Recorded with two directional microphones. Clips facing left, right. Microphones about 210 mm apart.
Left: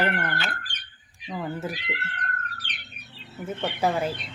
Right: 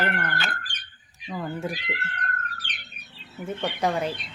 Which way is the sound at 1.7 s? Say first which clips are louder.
Right 1 dB; 45° right (ahead or behind).